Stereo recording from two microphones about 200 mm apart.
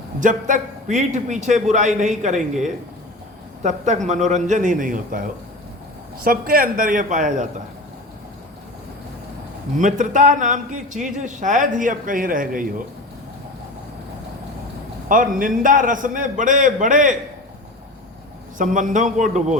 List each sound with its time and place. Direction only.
0.2 s a man's voice: 40° right (ahead or behind)
9.7 s a man's voice: 40° right (ahead or behind)
15.1 s a man's voice: 45° right (ahead or behind)
18.5 s a man's voice: 40° right (ahead or behind)